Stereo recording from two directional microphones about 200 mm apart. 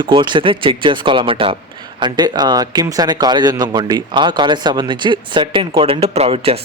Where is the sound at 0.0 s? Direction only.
25° right (ahead or behind).